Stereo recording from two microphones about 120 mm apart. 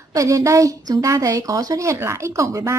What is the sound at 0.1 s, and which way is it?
Speech, 25° right (ahead or behind).